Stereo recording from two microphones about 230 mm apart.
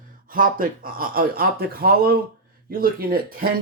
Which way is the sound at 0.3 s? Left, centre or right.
Right.